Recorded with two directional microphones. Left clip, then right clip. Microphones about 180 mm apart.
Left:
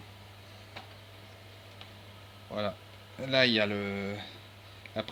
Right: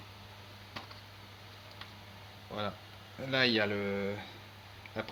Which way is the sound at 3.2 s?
35° left (ahead or behind).